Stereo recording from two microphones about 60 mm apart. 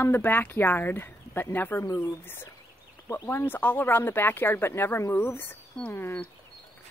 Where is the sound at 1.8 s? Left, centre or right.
Left.